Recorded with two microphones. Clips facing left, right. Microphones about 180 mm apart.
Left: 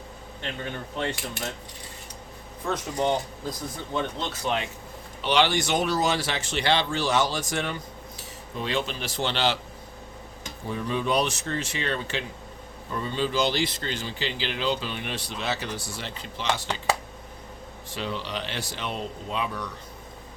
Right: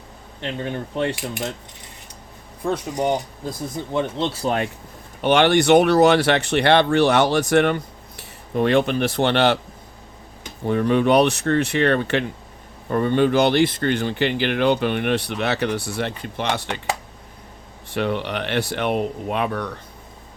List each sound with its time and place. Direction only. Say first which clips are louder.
1.0 s speech: right 5 dB; 15° right (ahead or behind)
2.6 s speech: right 4 dB; 15° right (ahead or behind)
3.9 s speech: right 7 dB; 30° right (ahead or behind)
5.2 s speech: right 7 dB; 55° right (ahead or behind)
10.7 s speech: right 10 dB; 65° right (ahead or behind)
17.9 s speech: right 8 dB; 60° right (ahead or behind)